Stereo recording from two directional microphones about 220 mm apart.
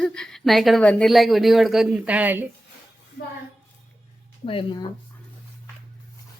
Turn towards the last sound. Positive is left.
turn(degrees=20)  # may be behind; listen again after turning